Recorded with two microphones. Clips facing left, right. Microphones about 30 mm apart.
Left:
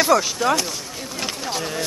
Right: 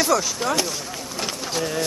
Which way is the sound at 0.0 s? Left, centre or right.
Centre.